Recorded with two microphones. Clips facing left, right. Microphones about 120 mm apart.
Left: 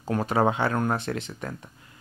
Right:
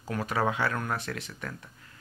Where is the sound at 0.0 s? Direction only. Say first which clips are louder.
Left 6 dB; 30° left (ahead or behind).